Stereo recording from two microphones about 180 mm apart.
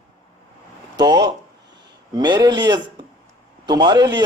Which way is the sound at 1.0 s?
25° right (ahead or behind).